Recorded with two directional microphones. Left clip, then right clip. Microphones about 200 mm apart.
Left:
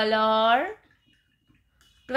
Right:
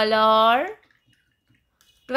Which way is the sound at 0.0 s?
20° right (ahead or behind).